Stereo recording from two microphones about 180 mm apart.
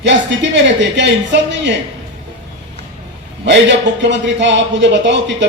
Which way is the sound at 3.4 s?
85° right.